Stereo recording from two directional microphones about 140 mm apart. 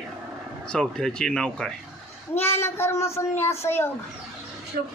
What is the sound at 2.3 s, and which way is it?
Speech, 15° left (ahead or behind).